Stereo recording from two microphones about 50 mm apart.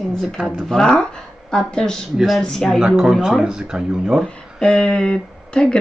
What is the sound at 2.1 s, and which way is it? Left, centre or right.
Speech, centre.